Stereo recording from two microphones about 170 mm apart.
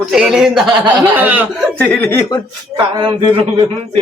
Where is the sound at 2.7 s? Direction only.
25° right (ahead or behind).